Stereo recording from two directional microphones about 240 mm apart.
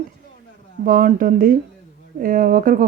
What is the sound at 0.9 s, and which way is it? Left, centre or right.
A woman's voice, right.